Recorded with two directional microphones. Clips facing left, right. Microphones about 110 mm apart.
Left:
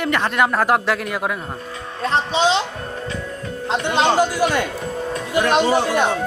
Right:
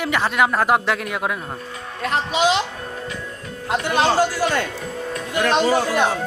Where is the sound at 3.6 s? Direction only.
25° left (ahead or behind).